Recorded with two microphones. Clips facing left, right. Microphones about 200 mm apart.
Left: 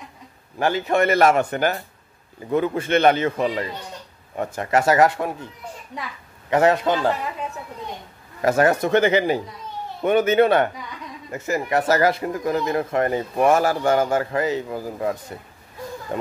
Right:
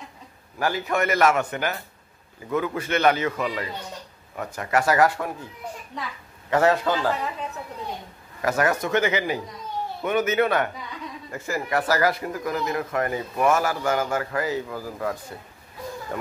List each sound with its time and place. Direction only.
0.6 s speech: 25° left (ahead or behind)
6.5 s speech: 20° left (ahead or behind)
8.4 s speech: 30° left (ahead or behind)